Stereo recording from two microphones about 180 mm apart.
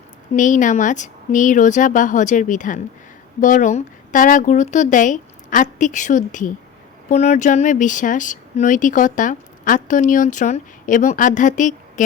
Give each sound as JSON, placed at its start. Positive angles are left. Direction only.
{"t": 0.3, "sound": "speech", "side_deg": 45}